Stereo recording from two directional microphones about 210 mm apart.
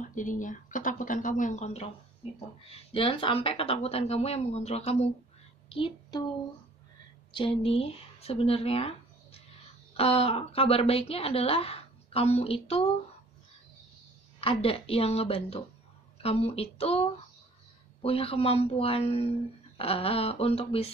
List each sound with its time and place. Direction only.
0.0 s speech: 40° left (ahead or behind)
2.9 s a woman's voice: 25° left (ahead or behind)
7.3 s a woman's voice: 25° left (ahead or behind)
14.4 s a woman's voice: 25° left (ahead or behind)